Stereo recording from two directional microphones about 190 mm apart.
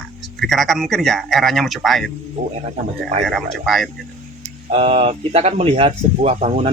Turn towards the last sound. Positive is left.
turn(degrees=-35)  # may be behind; listen again after turning